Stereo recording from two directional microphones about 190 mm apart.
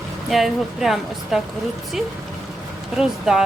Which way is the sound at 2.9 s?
5° right (ahead or behind).